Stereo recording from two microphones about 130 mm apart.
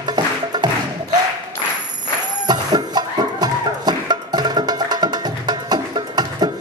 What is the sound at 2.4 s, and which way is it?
Music, 30° right (ahead or behind).